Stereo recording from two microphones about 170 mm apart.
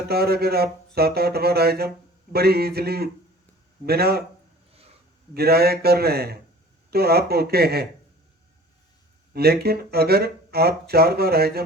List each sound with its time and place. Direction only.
0.1 s speech: 65° right (ahead or behind)
5.3 s speech: 65° right (ahead or behind)
9.3 s speech: 65° right (ahead or behind)